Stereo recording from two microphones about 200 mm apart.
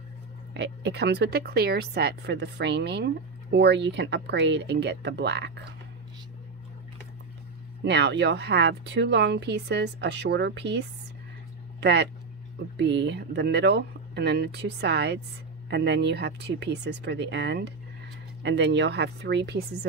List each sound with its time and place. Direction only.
0.6 s speech: 55° right (ahead or behind)
7.8 s speech: 60° right (ahead or behind)